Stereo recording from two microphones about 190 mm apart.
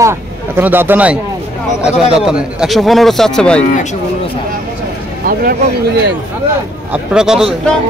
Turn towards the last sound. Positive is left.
turn(degrees=0)  # may be behind; listen again after turning